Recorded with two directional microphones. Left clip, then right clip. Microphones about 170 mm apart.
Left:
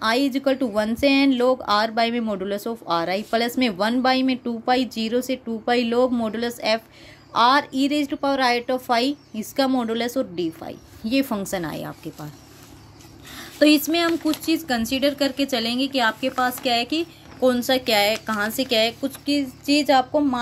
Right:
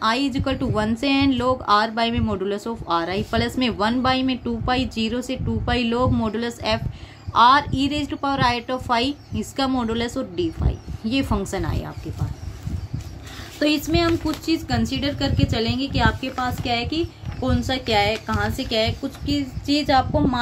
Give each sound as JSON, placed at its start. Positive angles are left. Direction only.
{"t": 0.0, "sound": "a woman's voice", "side_deg": 35}
{"t": 13.6, "sound": "a woman's voice", "side_deg": 50}